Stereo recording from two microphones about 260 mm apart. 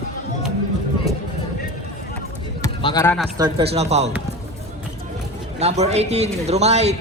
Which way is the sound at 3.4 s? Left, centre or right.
Centre.